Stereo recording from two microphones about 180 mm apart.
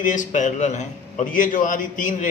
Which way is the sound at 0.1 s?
45° left (ahead or behind).